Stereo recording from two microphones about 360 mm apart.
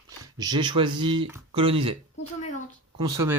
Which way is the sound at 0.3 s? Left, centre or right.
Centre.